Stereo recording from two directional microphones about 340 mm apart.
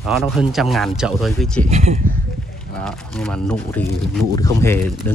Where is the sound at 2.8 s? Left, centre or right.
Centre.